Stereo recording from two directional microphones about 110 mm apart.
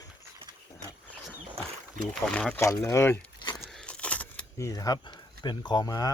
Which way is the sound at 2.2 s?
5° left (ahead or behind).